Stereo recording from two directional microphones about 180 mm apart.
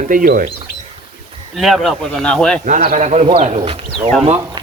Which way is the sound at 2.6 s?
45° right (ahead or behind).